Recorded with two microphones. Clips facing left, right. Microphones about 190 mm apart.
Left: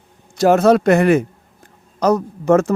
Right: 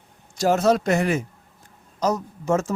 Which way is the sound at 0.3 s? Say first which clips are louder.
Left 7 dB; 60° left (ahead or behind).